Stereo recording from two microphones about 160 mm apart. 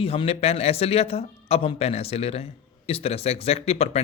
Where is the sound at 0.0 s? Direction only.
35° left (ahead or behind).